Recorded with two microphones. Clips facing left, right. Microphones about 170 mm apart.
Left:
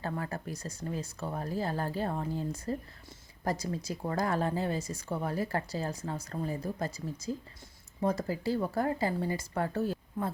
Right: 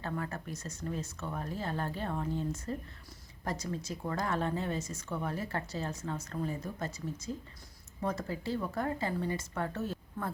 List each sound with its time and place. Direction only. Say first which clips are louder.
0.0 s a woman's voice: left 2 dB; 35° left (ahead or behind)
8.0 s a woman's voice: left 5 dB; 35° left (ahead or behind)